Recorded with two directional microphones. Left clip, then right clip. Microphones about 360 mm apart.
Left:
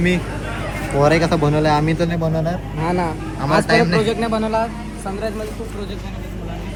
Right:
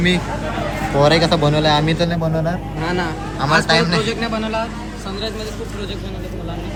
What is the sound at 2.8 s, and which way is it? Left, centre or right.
Speech, centre.